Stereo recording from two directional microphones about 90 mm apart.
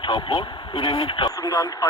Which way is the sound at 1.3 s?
50° left (ahead or behind).